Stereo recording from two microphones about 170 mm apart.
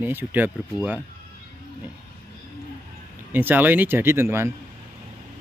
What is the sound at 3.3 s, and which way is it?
Speech, 10° right (ahead or behind).